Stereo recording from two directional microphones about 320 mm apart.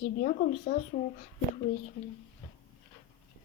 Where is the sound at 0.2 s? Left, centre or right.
Left.